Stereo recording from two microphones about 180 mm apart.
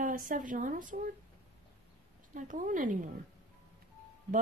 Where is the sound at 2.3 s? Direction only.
45° right (ahead or behind).